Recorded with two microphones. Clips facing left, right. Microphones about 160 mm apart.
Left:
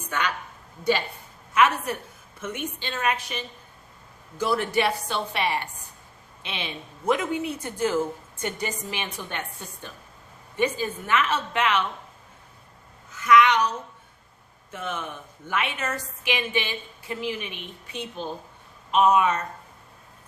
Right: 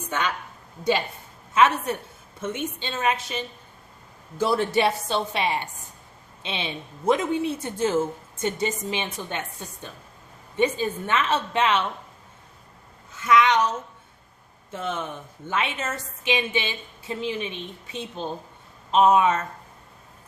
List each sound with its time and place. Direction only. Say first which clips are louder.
1.5 s a woman's voice: right 2 dB; 25° right (ahead or behind)
10.6 s a woman's voice: right 2 dB; 25° right (ahead or behind)
13.1 s a woman's voice: left 1 dB; 25° right (ahead or behind)
18.9 s a woman's voice: right 2 dB; 25° right (ahead or behind)